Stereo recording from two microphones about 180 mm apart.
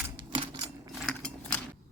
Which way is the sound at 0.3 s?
20° right (ahead or behind).